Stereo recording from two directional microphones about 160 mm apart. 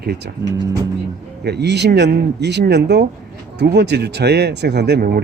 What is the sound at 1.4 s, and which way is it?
Speech, 90° right.